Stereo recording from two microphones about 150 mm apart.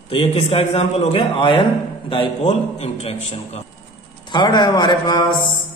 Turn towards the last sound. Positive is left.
turn(degrees=30)  # may be behind; listen again after turning